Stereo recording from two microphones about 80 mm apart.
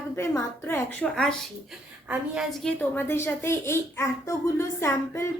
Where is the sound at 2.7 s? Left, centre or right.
Left.